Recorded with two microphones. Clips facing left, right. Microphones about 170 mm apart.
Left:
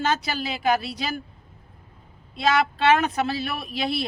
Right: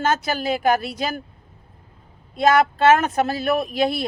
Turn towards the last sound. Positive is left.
turn(degrees=-50)  # may be behind; listen again after turning